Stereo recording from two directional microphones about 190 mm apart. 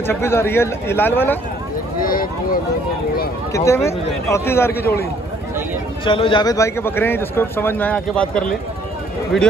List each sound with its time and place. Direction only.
0.0 s a man's voice: 10° left (ahead or behind)
2.0 s a sound: 50° left (ahead or behind)
3.5 s a man's voice: 15° left (ahead or behind)
6.0 s a man's voice: 25° left (ahead or behind); by 8.5 s 5° left (ahead or behind)